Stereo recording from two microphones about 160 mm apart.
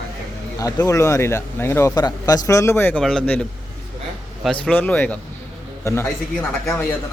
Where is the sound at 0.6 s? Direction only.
20° left (ahead or behind).